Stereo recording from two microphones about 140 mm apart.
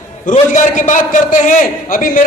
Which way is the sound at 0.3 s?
65° left (ahead or behind).